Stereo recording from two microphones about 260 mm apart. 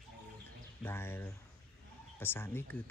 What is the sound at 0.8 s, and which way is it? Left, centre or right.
Speech, centre.